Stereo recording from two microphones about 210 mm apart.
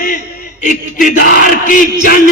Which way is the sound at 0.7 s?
40° left (ahead or behind).